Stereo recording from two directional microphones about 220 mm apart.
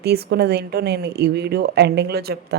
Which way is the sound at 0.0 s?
45° right (ahead or behind).